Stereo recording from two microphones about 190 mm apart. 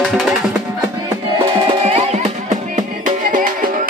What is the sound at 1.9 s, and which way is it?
Music, 35° right (ahead or behind).